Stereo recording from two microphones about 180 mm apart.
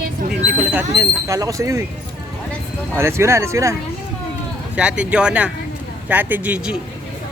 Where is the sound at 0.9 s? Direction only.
15° right (ahead or behind).